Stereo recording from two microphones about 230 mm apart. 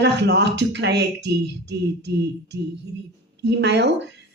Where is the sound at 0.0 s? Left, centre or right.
Right.